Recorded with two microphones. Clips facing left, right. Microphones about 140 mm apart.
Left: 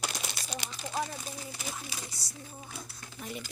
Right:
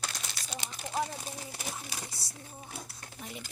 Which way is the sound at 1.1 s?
30° right (ahead or behind).